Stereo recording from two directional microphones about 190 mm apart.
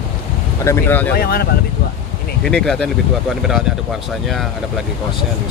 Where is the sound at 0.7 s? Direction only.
10° left (ahead or behind).